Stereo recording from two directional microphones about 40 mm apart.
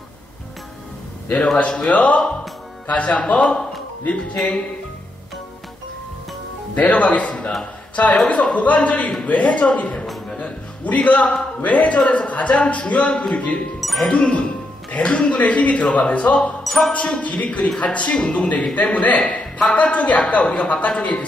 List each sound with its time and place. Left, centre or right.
1.6 s a man's voice: left
6.7 s a woman's voice: left
10.4 s music: left
11.6 s speech: left
13.7 s music: centre
14.1 s speech: left
16.6 s music: centre
16.9 s a man's voice: left